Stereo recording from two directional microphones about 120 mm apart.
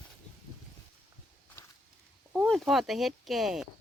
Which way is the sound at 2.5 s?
Centre (ahead or behind).